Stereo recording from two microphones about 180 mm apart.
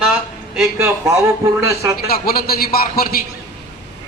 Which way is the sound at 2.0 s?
55° left (ahead or behind).